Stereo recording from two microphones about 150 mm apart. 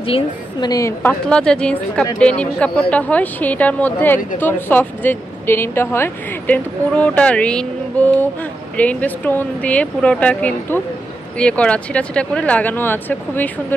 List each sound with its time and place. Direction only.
0.0 s a woman's voice: 35° left (ahead or behind)
0.7 s a woman's voice: 20° left (ahead or behind)
1.0 s speech: 5° left (ahead or behind)